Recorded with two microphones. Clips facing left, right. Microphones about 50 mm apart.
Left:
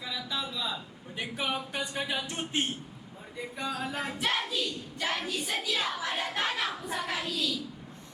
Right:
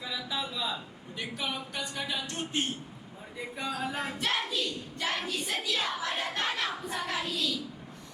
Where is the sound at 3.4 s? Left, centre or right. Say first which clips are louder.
Even; centre.